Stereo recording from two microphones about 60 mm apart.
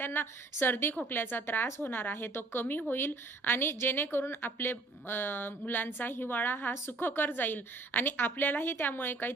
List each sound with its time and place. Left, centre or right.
0.0 s a woman's voice: left